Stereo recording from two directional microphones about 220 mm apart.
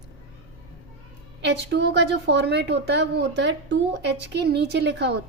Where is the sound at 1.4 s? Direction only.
50° right (ahead or behind).